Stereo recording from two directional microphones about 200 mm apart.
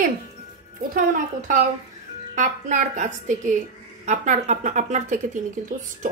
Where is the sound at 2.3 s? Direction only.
40° right (ahead or behind).